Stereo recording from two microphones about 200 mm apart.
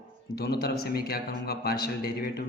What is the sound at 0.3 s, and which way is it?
A man's voice, 50° left (ahead or behind).